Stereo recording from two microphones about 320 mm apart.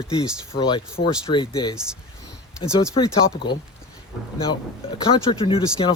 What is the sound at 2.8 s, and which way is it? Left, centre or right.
Speech, centre.